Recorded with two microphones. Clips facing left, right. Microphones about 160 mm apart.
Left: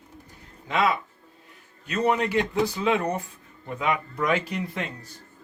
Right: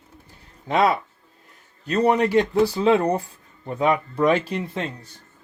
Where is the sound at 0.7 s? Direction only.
35° right (ahead or behind).